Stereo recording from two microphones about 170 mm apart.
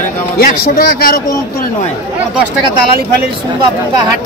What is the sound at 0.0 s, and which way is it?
A man's voice, 55° left (ahead or behind).